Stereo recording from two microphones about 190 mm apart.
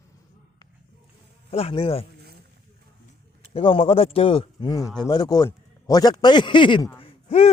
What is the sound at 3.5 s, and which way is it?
Speech, 30° left (ahead or behind).